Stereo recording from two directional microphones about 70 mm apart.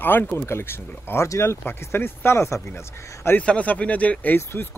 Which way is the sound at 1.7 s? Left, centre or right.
Left.